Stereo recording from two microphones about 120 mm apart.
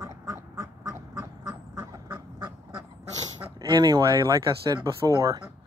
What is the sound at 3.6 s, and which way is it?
Speech, 35° right (ahead or behind).